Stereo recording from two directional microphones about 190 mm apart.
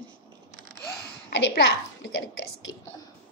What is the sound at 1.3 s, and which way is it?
Speech, 65° left (ahead or behind).